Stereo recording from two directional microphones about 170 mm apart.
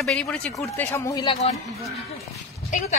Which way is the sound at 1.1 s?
30° left (ahead or behind).